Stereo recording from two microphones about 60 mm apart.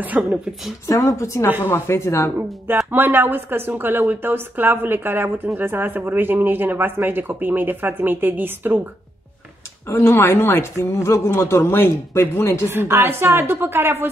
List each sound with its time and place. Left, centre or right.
0.2 s speech: right
0.8 s speech: left
1.7 s speech: left
2.9 s speech: right
9.8 s speech: left
10.2 s speech: left
10.8 s speech: left
12.6 s speech: right